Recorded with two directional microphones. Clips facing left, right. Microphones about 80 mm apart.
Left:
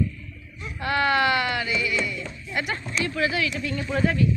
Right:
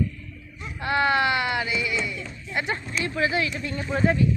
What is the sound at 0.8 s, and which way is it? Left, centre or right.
Speech, right.